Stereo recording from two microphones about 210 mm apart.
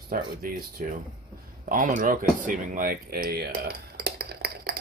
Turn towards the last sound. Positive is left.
turn(degrees=-50)  # may be behind; listen again after turning